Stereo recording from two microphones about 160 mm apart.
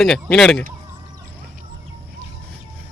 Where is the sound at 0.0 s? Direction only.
Centre (ahead or behind).